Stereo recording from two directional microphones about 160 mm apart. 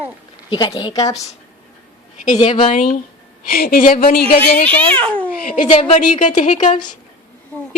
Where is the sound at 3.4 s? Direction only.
70° left (ahead or behind).